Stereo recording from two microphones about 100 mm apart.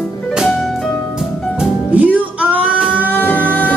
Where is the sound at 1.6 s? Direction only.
15° right (ahead or behind).